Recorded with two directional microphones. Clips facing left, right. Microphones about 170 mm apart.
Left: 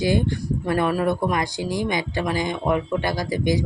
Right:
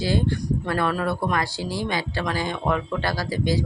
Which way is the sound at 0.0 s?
15° left (ahead or behind).